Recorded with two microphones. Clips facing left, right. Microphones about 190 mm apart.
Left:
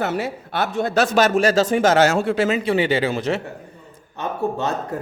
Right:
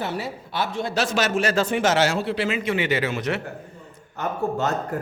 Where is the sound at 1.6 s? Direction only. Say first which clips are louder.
Left 5 dB; 45° left (ahead or behind); by 3.4 s 30° left (ahead or behind).